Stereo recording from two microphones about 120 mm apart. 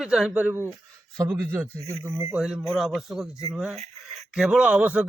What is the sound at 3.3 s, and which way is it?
Speech, 25° left (ahead or behind).